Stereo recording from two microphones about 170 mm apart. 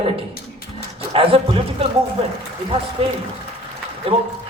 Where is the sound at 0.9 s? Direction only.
35° right (ahead or behind).